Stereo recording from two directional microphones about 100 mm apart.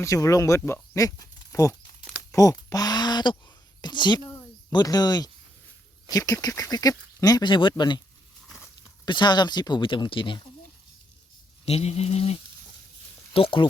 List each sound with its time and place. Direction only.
0.0 s speech: 35° left (ahead or behind)
2.3 s a sound: 35° left (ahead or behind)
4.7 s speech: 40° left (ahead or behind)
9.0 s speech: 50° left (ahead or behind)
11.6 s speech: 90° left
13.3 s speech: 65° left (ahead or behind)